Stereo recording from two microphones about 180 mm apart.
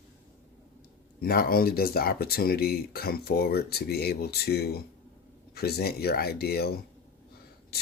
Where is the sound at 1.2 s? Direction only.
55° left (ahead or behind).